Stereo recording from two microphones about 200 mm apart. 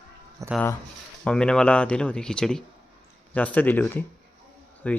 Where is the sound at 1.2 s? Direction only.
5° left (ahead or behind).